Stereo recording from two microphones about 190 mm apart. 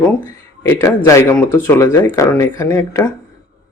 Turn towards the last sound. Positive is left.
turn(degrees=15)  # may be behind; listen again after turning